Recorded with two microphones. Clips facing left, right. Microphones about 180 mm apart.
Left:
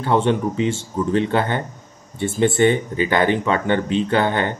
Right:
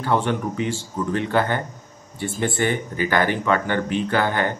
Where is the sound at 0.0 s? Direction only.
25° left (ahead or behind).